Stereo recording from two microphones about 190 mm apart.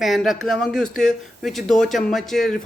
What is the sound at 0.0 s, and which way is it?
Speech, centre (ahead or behind).